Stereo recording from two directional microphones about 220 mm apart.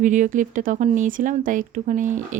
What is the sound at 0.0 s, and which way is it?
Speech, 35° right (ahead or behind).